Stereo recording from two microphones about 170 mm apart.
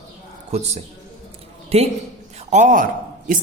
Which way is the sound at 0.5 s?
40° right (ahead or behind).